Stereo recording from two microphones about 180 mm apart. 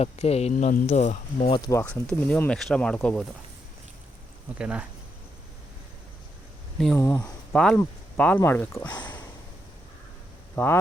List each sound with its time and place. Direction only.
0.0 s speech: 35° left (ahead or behind)
1.5 s speech: 25° left (ahead or behind)
1.7 s speech: 10° left (ahead or behind)
4.5 s speech: 5° right (ahead or behind)
6.7 s speech: centre (ahead or behind)
10.5 s speech: 10° left (ahead or behind)